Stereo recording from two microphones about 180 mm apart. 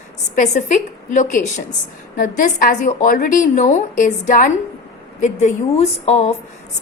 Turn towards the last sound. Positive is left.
turn(degrees=40)  # may be behind; listen again after turning